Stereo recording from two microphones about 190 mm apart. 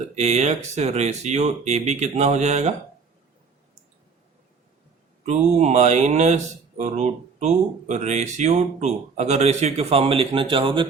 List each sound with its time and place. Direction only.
0.2 s speech: 35° right (ahead or behind)
5.2 s speech: 35° right (ahead or behind)